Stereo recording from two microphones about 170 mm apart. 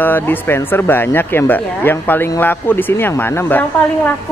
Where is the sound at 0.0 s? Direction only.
10° left (ahead or behind).